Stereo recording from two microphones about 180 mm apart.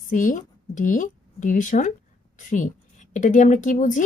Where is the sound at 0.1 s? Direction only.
45° left (ahead or behind).